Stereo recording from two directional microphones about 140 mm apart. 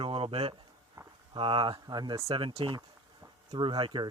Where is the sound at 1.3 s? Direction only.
35° right (ahead or behind).